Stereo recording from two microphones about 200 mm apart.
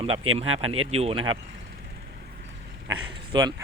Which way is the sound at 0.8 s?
30° right (ahead or behind).